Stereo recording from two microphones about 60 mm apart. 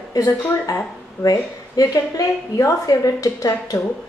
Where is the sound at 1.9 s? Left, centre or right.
Left.